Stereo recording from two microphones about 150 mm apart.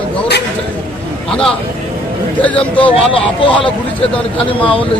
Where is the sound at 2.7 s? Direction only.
35° left (ahead or behind).